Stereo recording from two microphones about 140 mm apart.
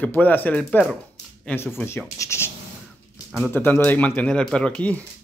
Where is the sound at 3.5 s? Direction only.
15° left (ahead or behind).